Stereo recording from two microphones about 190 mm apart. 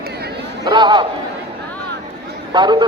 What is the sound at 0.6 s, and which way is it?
Speech, 25° right (ahead or behind).